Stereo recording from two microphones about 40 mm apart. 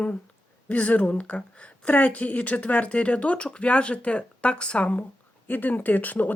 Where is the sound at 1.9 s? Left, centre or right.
Left.